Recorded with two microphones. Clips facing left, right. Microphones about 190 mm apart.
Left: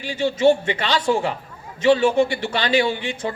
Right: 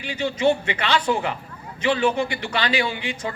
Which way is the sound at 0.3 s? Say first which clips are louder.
Left 4 dB; 45° left (ahead or behind).